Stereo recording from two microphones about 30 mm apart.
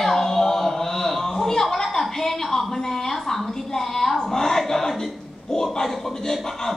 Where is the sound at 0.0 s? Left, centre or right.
Centre.